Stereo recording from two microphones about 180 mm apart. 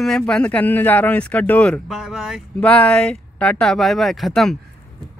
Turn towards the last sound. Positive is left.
turn(degrees=0)  # may be behind; listen again after turning